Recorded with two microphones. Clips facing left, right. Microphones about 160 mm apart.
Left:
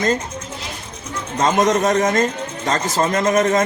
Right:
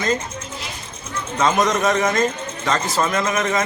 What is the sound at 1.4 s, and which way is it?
Speech, 35° left (ahead or behind).